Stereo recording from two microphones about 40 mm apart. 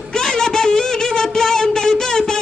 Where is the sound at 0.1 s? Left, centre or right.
Centre.